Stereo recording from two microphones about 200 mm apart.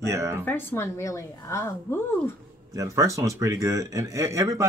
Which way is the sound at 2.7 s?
15° right (ahead or behind).